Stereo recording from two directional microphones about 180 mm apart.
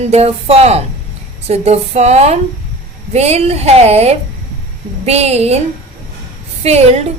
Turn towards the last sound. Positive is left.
turn(degrees=-35)  # may be behind; listen again after turning